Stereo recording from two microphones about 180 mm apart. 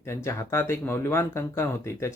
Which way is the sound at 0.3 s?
15° left (ahead or behind).